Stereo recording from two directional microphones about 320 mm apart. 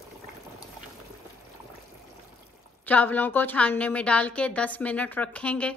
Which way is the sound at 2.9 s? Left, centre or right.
Centre.